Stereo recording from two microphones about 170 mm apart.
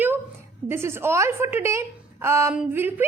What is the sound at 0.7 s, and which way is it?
A woman's voice, 15° right (ahead or behind).